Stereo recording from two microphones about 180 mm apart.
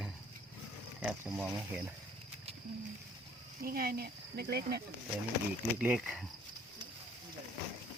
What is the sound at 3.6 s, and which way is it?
Speech, 55° right (ahead or behind).